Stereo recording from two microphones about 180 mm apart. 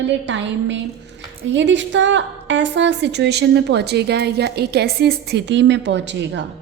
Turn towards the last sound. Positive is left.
turn(degrees=-80)